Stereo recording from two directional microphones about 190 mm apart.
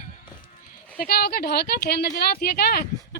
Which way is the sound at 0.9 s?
55° left (ahead or behind).